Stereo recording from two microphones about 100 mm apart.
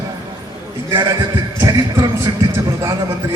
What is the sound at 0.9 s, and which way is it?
A man's voice, 40° right (ahead or behind).